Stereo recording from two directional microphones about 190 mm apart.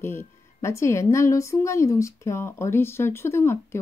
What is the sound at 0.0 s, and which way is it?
Speech, 10° left (ahead or behind).